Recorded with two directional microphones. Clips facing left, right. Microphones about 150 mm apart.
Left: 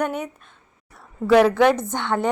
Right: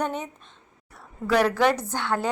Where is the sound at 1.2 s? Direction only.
5° left (ahead or behind).